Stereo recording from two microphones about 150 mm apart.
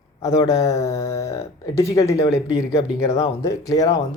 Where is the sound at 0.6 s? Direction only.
20° left (ahead or behind).